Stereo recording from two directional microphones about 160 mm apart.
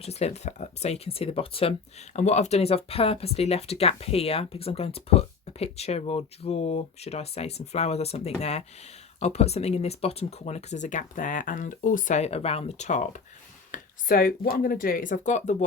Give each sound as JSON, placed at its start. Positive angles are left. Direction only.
{"t": 0.0, "sound": "speech", "side_deg": 40}
{"t": 2.1, "sound": "speech", "side_deg": 45}
{"t": 13.7, "sound": "speech", "side_deg": 65}